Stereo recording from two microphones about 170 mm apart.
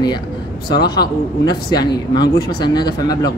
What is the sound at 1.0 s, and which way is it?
Speech, 70° left (ahead or behind).